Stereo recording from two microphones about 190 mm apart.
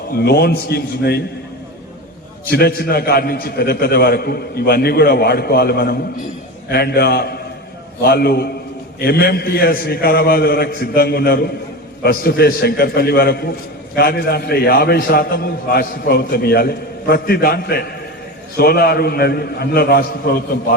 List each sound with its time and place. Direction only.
0.1 s a man's voice: 55° left (ahead or behind)
2.5 s a man's voice: 55° left (ahead or behind)